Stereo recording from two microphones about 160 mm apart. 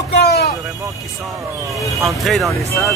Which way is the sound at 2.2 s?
Centre (ahead or behind).